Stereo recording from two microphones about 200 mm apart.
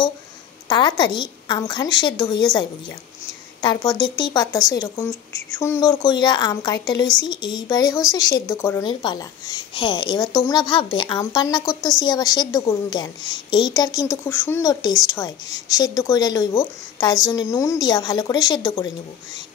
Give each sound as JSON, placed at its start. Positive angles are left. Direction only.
{"t": 0.7, "sound": "speech", "side_deg": 20}
{"t": 3.6, "sound": "speech", "side_deg": 20}